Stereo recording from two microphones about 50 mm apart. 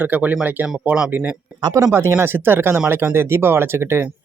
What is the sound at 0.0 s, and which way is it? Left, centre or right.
Speech, right.